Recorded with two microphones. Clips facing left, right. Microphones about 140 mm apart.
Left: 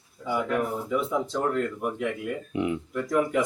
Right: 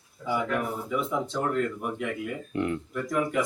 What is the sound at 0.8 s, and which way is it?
Speech, centre (ahead or behind).